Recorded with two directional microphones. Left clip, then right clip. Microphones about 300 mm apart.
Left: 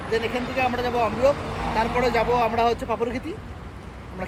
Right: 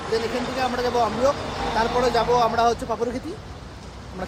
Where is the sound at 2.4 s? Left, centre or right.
Centre.